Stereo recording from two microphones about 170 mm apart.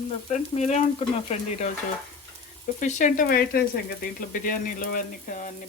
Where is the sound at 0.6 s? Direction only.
40° left (ahead or behind).